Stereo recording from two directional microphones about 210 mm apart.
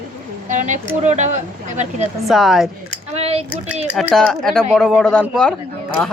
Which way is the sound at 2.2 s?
Centre (ahead or behind).